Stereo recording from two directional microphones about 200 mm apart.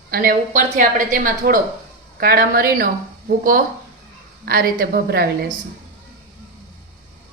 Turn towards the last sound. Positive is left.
turn(degrees=-50)  # may be behind; listen again after turning